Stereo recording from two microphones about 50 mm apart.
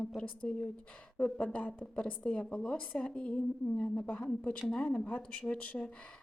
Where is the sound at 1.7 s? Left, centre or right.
Centre.